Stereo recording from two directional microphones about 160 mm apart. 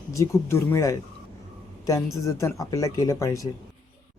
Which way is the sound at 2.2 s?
20° left (ahead or behind).